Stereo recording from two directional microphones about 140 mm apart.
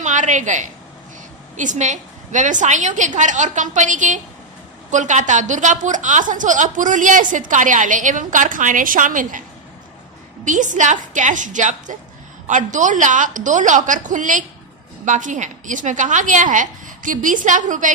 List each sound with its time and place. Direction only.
0.0 s a woman's voice: 60° right (ahead or behind)
10.4 s a woman's voice: 65° right (ahead or behind)